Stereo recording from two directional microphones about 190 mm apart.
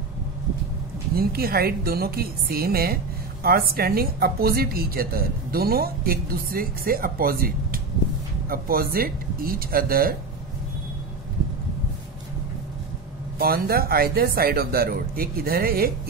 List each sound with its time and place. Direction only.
1.1 s a woman's voice: 55° right (ahead or behind)
13.4 s a woman's voice: 50° right (ahead or behind)